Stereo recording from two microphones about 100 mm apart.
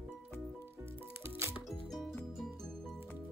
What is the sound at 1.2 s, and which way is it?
Music, 25° right (ahead or behind).